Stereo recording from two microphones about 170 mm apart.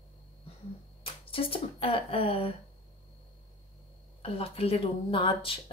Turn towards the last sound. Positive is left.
turn(degrees=30)  # may be behind; listen again after turning